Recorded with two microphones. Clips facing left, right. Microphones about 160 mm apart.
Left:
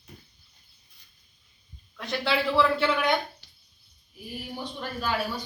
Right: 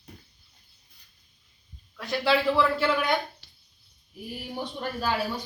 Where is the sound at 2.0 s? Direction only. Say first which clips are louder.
Right 3 dB; centre (ahead or behind).